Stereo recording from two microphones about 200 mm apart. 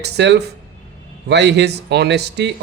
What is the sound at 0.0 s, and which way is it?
Speech, 55° right (ahead or behind).